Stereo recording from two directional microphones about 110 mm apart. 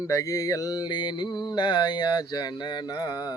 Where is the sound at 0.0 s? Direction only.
30° left (ahead or behind).